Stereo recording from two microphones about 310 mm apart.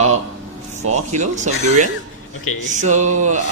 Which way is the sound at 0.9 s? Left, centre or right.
Right.